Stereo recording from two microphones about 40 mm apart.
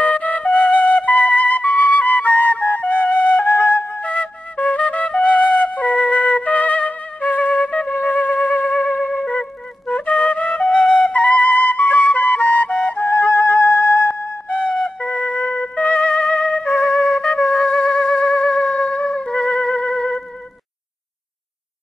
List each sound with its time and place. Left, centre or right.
0.0 s flute: left
9.2 s wind instrument: left
9.8 s flute: left
14.7 s music: left
16.9 s flute: left
17.5 s music: left